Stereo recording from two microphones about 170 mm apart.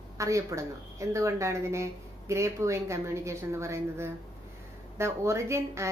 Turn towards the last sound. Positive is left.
turn(degrees=-15)  # may be behind; listen again after turning